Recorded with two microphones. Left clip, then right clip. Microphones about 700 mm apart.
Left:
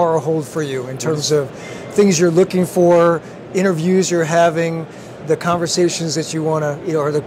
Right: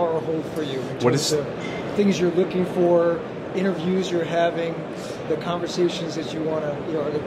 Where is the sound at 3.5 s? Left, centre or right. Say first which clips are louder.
Left 8 dB; left.